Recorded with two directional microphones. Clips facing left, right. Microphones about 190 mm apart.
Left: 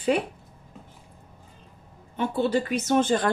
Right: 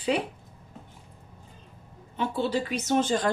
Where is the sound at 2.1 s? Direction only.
50° left (ahead or behind).